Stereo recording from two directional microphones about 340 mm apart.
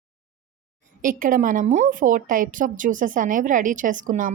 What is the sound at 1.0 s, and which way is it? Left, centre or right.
A woman's voice, right.